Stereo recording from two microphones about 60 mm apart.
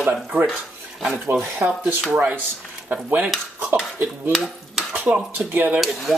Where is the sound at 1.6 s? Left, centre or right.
Right.